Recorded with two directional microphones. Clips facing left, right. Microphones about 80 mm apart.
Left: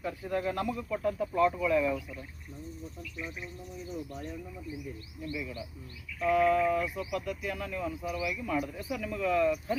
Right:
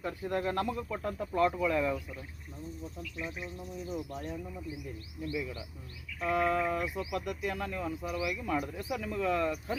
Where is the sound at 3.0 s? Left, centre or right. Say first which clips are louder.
Right 2 dB; right.